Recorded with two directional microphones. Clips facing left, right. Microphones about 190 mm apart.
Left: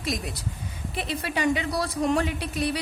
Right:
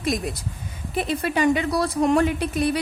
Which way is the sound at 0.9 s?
50° right (ahead or behind).